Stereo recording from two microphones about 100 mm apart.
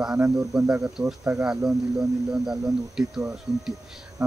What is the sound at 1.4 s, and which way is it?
Speech, 5° right (ahead or behind).